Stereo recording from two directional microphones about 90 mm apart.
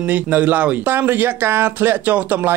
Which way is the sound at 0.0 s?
15° right (ahead or behind).